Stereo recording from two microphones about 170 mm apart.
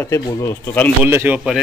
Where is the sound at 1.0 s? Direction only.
10° right (ahead or behind).